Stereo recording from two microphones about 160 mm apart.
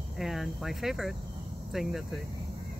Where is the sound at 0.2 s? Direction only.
Centre (ahead or behind).